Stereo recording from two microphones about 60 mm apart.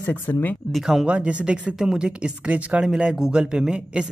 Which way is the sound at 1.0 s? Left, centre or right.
Right.